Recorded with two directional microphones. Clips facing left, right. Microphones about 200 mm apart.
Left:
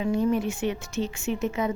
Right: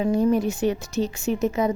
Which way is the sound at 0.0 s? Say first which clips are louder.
Right 4 dB; 40° right (ahead or behind).